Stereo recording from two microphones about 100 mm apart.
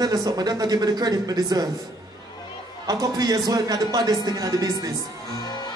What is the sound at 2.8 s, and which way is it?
Speech, 40° right (ahead or behind).